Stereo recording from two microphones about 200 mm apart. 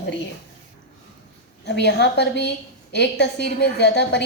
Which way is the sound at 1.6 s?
60° left (ahead or behind).